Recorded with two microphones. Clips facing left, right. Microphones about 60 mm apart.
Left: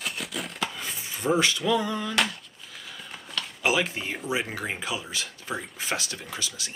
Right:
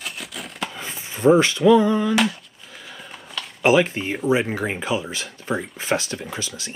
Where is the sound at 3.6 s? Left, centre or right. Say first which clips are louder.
Right 9 dB; right.